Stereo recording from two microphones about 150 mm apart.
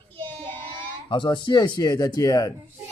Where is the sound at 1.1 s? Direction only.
30° left (ahead or behind).